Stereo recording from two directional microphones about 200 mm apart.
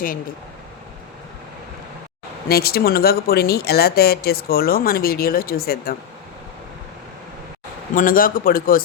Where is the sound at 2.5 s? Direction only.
50° left (ahead or behind).